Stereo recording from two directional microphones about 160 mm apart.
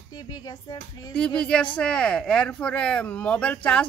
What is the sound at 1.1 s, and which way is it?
A man's voice, 5° left (ahead or behind).